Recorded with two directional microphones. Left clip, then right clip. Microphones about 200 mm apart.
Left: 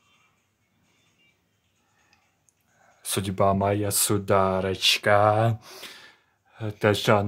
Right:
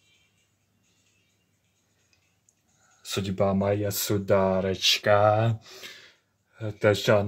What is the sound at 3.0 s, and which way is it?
Speech, 35° left (ahead or behind).